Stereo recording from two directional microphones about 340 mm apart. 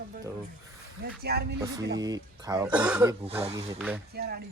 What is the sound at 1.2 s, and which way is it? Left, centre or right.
Speech, right.